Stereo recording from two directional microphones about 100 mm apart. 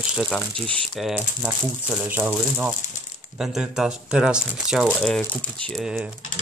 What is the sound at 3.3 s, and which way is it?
Speech, 5° right (ahead or behind).